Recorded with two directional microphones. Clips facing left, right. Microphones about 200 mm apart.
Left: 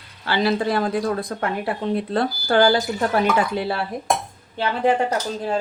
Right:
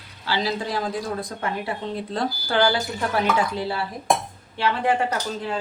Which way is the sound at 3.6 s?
60° left (ahead or behind).